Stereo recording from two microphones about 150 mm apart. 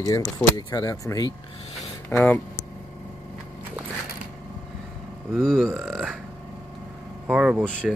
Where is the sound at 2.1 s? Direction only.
10° left (ahead or behind).